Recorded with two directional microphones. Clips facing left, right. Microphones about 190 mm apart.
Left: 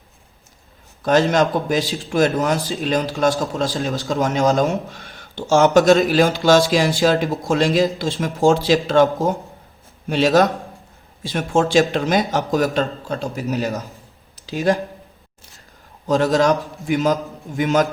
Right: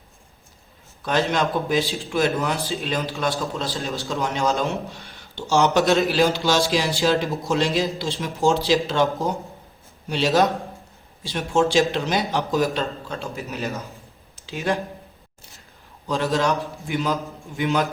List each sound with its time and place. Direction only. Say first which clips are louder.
1.0 s speech: left 6 dB; 45° left (ahead or behind)
16.0 s speech: left 6 dB; 45° left (ahead or behind)
17.6 s speech: left 5 dB; 45° left (ahead or behind)